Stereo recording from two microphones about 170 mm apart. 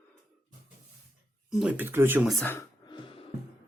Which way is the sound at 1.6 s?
10° right (ahead or behind).